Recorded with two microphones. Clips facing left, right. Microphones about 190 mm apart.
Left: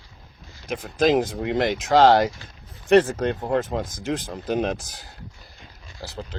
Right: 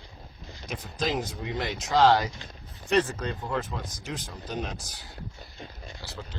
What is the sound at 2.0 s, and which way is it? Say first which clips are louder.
Speech: left 4 dB; 50° left (ahead or behind).